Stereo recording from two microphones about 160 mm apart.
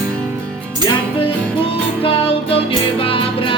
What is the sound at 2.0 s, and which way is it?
Music, 35° left (ahead or behind).